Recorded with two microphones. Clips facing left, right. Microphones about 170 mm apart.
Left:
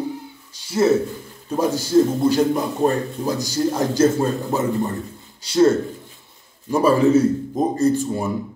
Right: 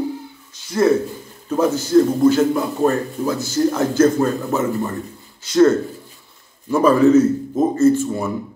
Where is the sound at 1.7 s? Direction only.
35° left (ahead or behind).